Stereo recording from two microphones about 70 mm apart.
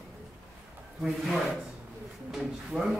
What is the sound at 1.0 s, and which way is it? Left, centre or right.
A man's voice, centre.